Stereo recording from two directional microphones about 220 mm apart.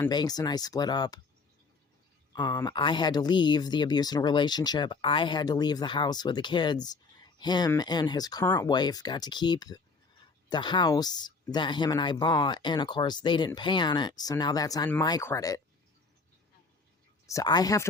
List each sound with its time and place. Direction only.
0.0 s speech: 20° left (ahead or behind)
2.3 s speech: 20° left (ahead or behind)
17.2 s speech: 15° left (ahead or behind)